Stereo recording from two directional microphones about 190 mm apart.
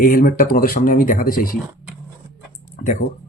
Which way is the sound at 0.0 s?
50° left (ahead or behind).